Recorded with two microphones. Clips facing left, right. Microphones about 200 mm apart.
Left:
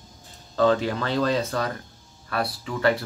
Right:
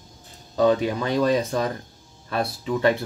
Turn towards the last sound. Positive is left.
turn(degrees=-20)  # may be behind; listen again after turning